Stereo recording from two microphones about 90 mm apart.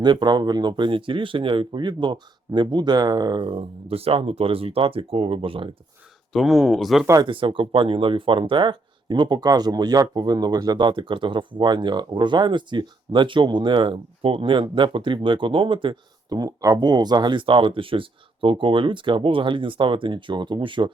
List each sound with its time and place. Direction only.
0.0 s speech: 55° right (ahead or behind)
3.4 s speech: 85° right
6.3 s speech: 5° right (ahead or behind)
7.3 s speech: 70° right (ahead or behind)
16.3 s speech: 45° right (ahead or behind); by 20.9 s 65° right (ahead or behind)